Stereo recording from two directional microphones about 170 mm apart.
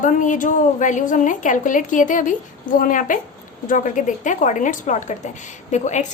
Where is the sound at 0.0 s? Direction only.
50° left (ahead or behind).